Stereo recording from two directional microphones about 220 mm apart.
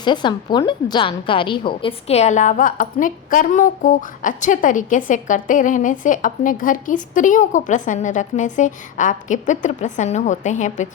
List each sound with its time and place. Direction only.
0.0 s a woman's voice: 20° left (ahead or behind)